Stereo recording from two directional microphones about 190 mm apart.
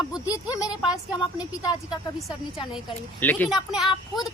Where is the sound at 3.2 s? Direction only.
10° left (ahead or behind).